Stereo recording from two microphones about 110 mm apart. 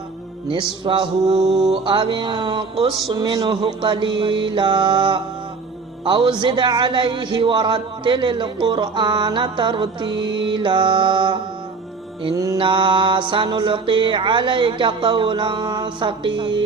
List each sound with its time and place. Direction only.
0.4 s a man's voice: 50° right (ahead or behind)
1.3 s mantra: 80° right
1.5 s mantra: 5° right (ahead or behind)
1.8 s a man's voice: 50° right (ahead or behind)
12.5 s a man's voice: 50° right (ahead or behind)